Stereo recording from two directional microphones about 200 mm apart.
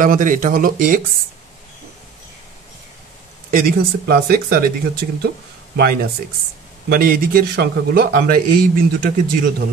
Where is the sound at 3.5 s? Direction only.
45° right (ahead or behind).